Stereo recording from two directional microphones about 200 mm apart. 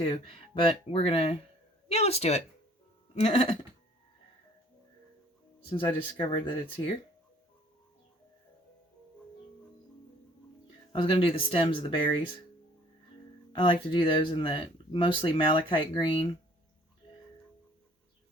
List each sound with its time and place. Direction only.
0.0 s speech: 25° left (ahead or behind)
5.7 s speech: 25° left (ahead or behind)
10.9 s speech: 25° left (ahead or behind)
13.5 s speech: 25° left (ahead or behind)